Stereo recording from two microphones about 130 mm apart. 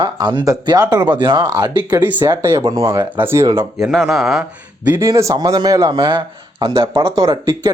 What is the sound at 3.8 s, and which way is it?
Speech, centre (ahead or behind).